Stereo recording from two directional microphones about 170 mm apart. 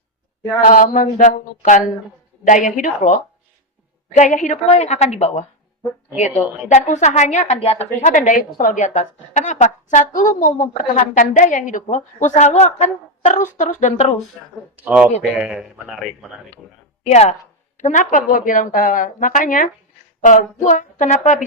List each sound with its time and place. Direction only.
0.6 s a woman's voice: 50° left (ahead or behind)
4.2 s a woman's voice: 45° left (ahead or behind)
6.7 s a woman's voice: 45° left (ahead or behind)
14.8 s a man's voice: 5° right (ahead or behind)
17.0 s a woman's voice: 40° left (ahead or behind)